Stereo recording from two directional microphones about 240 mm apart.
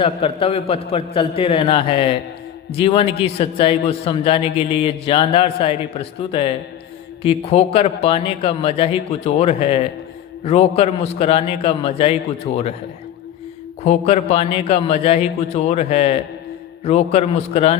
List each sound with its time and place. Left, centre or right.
0.0 s a man's voice: left
13.8 s a man's voice: left